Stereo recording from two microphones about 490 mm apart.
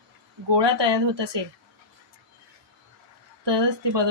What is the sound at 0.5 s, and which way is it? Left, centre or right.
Speech, right.